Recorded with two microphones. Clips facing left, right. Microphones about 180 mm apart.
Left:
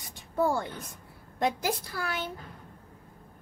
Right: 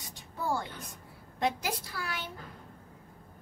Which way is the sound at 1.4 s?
45° left (ahead or behind).